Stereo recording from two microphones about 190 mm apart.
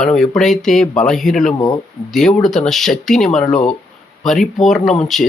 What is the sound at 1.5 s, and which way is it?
Speech, 20° left (ahead or behind).